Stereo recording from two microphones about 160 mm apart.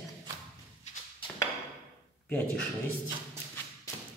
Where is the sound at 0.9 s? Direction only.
45° left (ahead or behind).